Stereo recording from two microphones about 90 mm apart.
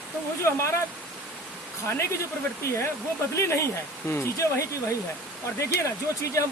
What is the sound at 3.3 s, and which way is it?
Speech, 35° left (ahead or behind).